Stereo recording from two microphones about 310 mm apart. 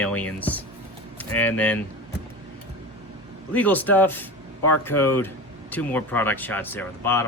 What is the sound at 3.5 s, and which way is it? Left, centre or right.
Speech, centre.